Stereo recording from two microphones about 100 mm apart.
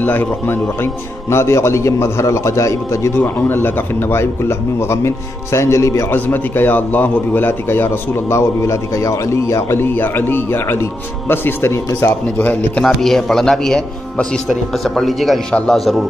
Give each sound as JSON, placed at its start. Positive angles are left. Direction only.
{"t": 0.0, "sound": "a man's voice", "side_deg": 20}
{"t": 6.1, "sound": "a man's voice", "side_deg": 20}
{"t": 12.8, "sound": "speech", "side_deg": 5}